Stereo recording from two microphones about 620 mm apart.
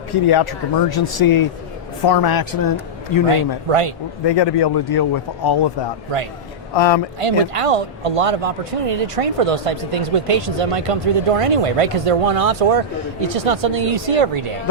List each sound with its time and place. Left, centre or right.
0.1 s a man's voice: left
3.3 s speech: right
4.3 s a man's voice: left
6.7 s speech: left
7.2 s speech: right